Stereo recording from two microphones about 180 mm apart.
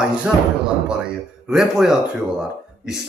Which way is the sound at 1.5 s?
Centre (ahead or behind).